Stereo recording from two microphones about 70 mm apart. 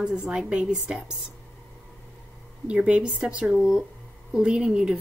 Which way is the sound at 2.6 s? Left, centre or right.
Centre.